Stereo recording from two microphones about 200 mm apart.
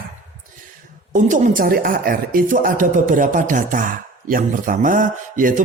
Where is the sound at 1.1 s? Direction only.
40° right (ahead or behind).